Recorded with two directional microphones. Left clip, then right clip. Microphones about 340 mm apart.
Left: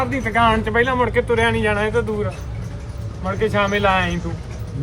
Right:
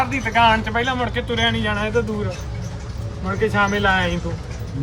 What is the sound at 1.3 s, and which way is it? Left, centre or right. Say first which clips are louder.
Speech: left 3 dB; centre.